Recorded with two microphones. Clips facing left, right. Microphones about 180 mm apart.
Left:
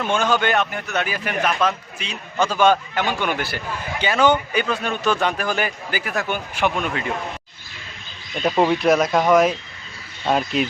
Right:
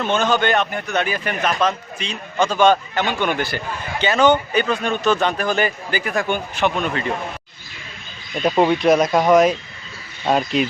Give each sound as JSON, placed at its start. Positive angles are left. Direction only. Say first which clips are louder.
{"t": 0.0, "sound": "a man's voice", "louder": "right 2 dB", "side_deg": 10}
{"t": 8.4, "sound": "speech", "louder": "right 2 dB", "side_deg": -5}
{"t": 9.3, "sound": "speech", "louder": "right 2 dB", "side_deg": 5}